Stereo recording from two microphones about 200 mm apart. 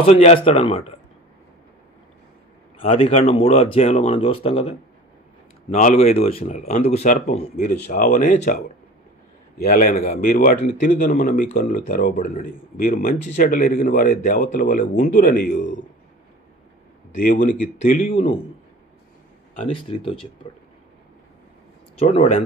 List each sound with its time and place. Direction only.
0.0 s a man's voice: 30° left (ahead or behind)
2.8 s a man's voice: 30° left (ahead or behind)
7.1 s a man's voice: 45° left (ahead or behind)
9.6 s a man's voice: 45° left (ahead or behind)
17.1 s a man's voice: 45° left (ahead or behind)
19.6 s speech: 25° left (ahead or behind)
22.0 s a man's voice: 35° left (ahead or behind)